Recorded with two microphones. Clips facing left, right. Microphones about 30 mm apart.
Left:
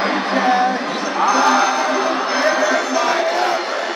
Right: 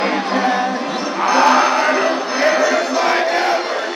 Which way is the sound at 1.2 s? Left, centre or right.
Right.